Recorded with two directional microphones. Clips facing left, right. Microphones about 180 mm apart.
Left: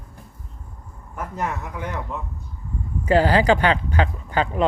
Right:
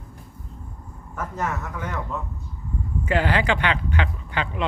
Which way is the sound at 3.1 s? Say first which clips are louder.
Left 6 dB; 35° left (ahead or behind).